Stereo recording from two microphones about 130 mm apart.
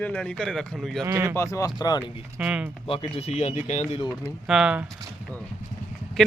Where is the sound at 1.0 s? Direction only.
20° right (ahead or behind).